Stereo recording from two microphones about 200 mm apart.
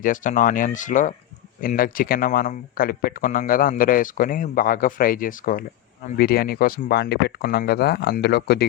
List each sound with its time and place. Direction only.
0.0 s speech: 40° left (ahead or behind)